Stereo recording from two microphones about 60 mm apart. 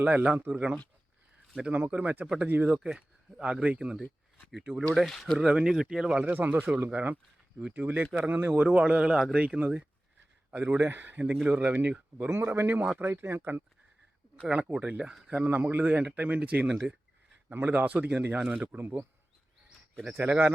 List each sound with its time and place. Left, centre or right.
0.0 s speech: right
1.7 s speech: right
4.9 s speech: centre
5.4 s speech: centre
6.1 s speech: right
8.6 s speech: centre
12.3 s speech: right
14.4 s speech: centre
15.4 s speech: right
16.6 s speech: centre
17.5 s speech: right
18.8 s speech: right
20.2 s speech: right